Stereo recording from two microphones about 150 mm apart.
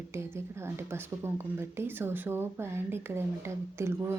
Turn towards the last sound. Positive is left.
turn(degrees=-15)  # may be behind; listen again after turning